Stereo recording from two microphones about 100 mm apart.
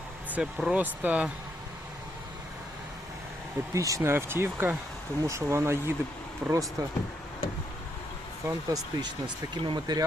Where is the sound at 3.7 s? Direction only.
30° right (ahead or behind).